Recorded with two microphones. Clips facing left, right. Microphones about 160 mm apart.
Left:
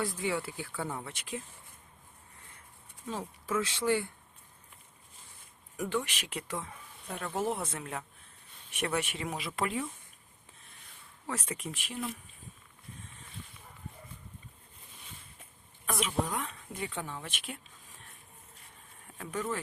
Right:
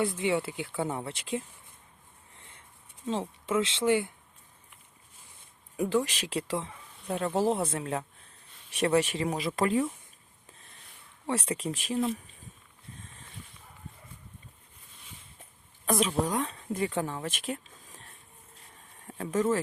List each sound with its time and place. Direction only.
0.0 s speech: 25° right (ahead or behind)
3.1 s speech: 25° right (ahead or behind)
5.7 s speech: 30° right (ahead or behind)
11.3 s speech: 30° right (ahead or behind)
15.9 s speech: 35° right (ahead or behind)
19.0 s speech: 35° right (ahead or behind)